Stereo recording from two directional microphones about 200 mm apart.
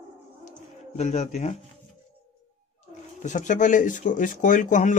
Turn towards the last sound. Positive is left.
turn(degrees=40)  # may be behind; listen again after turning